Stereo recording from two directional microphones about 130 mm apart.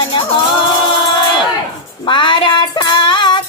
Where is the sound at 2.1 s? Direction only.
40° left (ahead or behind).